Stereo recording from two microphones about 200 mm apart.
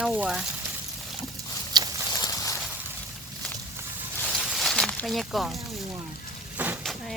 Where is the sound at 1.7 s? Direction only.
20° right (ahead or behind).